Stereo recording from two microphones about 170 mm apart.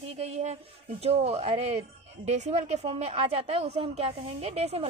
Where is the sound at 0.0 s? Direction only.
35° right (ahead or behind).